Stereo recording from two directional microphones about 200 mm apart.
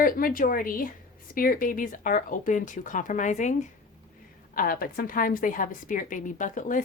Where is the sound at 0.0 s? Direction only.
45° left (ahead or behind).